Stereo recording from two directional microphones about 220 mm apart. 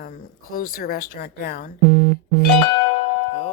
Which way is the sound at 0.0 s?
40° left (ahead or behind).